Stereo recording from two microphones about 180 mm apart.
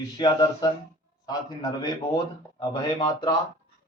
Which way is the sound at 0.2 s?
25° left (ahead or behind).